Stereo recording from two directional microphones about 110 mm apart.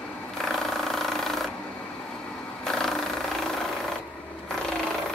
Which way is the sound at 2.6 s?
5° left (ahead or behind).